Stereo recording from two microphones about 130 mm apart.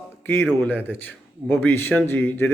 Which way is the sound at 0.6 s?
15° left (ahead or behind).